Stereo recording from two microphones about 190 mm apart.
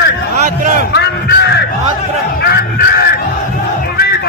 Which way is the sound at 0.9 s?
60° left (ahead or behind).